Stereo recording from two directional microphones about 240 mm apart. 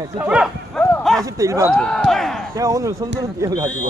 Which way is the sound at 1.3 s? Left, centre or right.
Centre.